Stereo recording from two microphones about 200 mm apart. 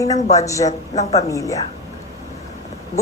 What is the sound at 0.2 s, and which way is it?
A woman's voice, 35° left (ahead or behind).